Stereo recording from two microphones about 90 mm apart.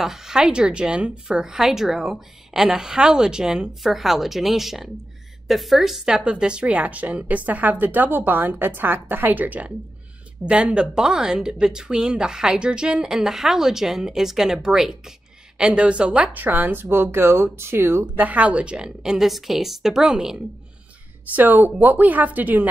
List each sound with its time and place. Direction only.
0.0 s a woman's voice: 5° right (ahead or behind)
21.3 s a woman's voice: 20° right (ahead or behind)